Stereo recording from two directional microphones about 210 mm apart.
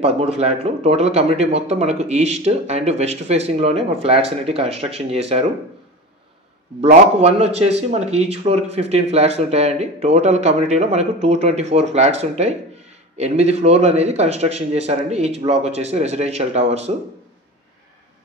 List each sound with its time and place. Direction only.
0.0 s speech: 30° right (ahead or behind)
6.8 s speech: 30° right (ahead or behind)